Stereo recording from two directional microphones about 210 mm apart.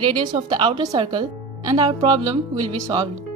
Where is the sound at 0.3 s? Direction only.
20° right (ahead or behind).